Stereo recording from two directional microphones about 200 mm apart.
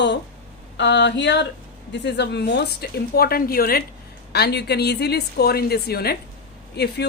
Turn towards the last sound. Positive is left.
turn(degrees=55)  # may be behind; listen again after turning